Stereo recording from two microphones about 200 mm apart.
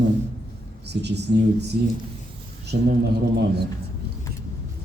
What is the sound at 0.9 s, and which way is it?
Speech, 55° right (ahead or behind).